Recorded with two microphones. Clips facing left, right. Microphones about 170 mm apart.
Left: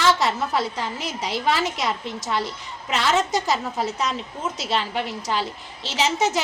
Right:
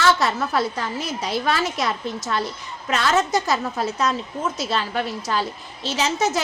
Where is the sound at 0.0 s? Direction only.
15° left (ahead or behind).